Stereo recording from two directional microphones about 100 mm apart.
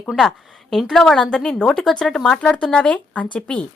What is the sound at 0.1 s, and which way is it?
A woman's voice, 5° left (ahead or behind).